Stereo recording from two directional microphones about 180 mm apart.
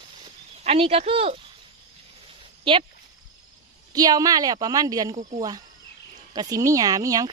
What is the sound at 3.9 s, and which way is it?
A woman's voice, 20° right (ahead or behind).